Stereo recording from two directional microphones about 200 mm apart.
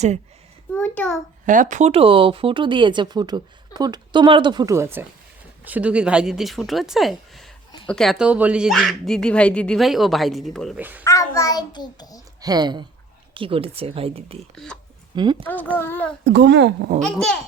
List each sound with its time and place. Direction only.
0.7 s a sound: 5° left (ahead or behind)
1.5 s a child's voice: 40° right (ahead or behind); by 11.0 s 10° right (ahead or behind)
11.0 s a child's voice: 15° left (ahead or behind)
12.4 s a woman's voice: 20° right (ahead or behind)
14.5 s speech: 5° left (ahead or behind)
15.1 s speech: 20° right (ahead or behind)
15.4 s a child's voice: 10° left (ahead or behind)
16.2 s a child's voice: 60° right (ahead or behind)
17.0 s speech: 5° left (ahead or behind)